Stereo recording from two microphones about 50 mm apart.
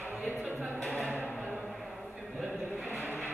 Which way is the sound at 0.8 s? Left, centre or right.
Centre.